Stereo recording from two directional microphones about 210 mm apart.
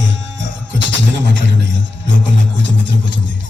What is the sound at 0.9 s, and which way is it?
Speech, 60° right (ahead or behind).